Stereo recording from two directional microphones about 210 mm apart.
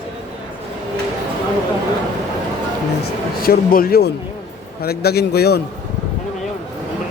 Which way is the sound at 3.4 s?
45° left (ahead or behind).